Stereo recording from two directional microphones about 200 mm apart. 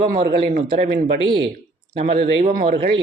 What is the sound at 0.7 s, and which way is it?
Speech, 30° right (ahead or behind).